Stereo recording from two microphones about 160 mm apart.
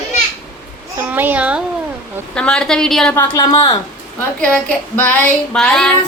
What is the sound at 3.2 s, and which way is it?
Speech, 25° left (ahead or behind).